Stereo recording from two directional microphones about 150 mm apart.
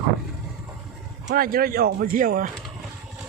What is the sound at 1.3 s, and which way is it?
Speech, 75° right (ahead or behind).